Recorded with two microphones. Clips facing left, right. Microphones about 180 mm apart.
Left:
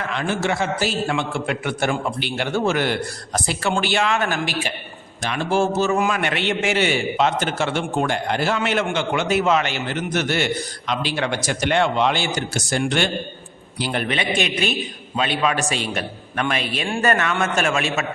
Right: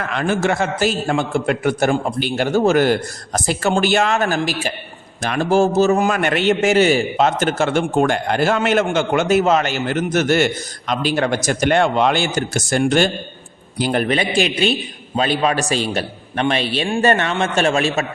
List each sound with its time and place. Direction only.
0.1 s a man's voice: 50° right (ahead or behind); by 18.0 s 35° right (ahead or behind)